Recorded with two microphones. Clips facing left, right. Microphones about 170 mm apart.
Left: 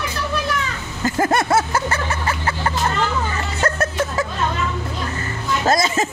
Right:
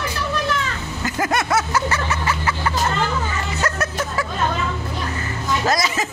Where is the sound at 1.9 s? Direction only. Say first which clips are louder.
Even; 30° left (ahead or behind).